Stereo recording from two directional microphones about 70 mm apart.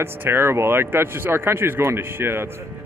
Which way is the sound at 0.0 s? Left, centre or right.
Right.